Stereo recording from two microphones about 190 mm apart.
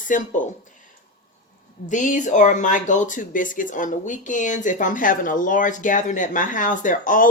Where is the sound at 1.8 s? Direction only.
40° left (ahead or behind).